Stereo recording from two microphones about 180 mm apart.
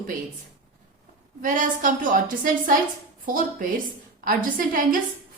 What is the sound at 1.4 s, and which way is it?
A woman's voice, 45° right (ahead or behind).